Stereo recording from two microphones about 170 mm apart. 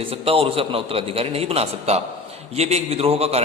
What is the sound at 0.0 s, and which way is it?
A man's voice, 35° right (ahead or behind).